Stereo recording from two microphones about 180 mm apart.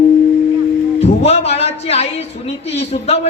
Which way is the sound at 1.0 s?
35° left (ahead or behind).